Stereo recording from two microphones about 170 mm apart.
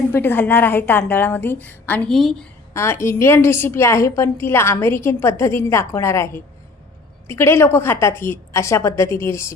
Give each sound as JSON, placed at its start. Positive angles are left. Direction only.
{"t": 0.1, "sound": "a woman's voice", "side_deg": 15}
{"t": 2.7, "sound": "a woman's voice", "side_deg": 15}